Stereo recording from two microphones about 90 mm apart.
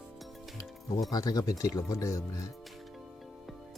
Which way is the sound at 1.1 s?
45° left (ahead or behind).